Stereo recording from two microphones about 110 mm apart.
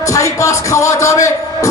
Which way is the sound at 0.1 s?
30° left (ahead or behind).